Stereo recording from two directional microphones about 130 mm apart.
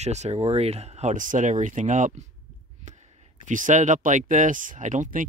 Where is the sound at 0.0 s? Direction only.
60° right (ahead or behind).